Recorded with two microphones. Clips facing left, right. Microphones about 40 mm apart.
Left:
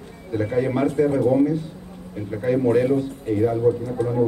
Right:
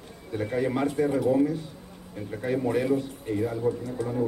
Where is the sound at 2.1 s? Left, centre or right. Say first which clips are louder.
Left 7 dB; centre.